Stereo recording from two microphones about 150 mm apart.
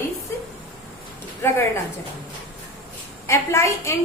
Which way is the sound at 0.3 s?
15° left (ahead or behind).